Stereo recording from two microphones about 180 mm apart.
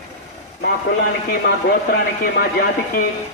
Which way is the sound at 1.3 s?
60° left (ahead or behind).